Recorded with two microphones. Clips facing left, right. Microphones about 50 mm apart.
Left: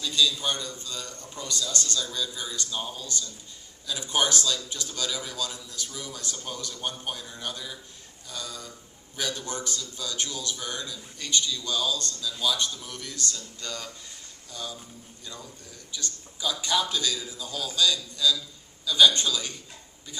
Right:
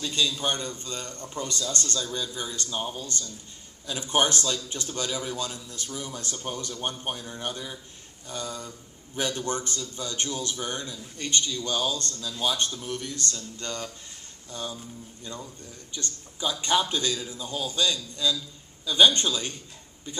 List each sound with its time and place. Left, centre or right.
0.0 s a man's voice: right
16.0 s a man's voice: right